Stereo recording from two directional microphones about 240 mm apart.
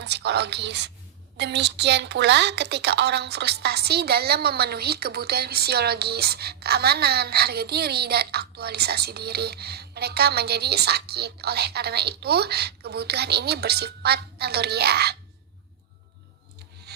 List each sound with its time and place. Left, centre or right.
0.0 s a woman's voice: right